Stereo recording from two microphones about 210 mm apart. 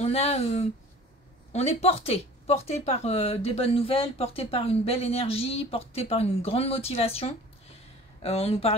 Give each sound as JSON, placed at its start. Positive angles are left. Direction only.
{"t": 0.0, "sound": "speech", "side_deg": 30}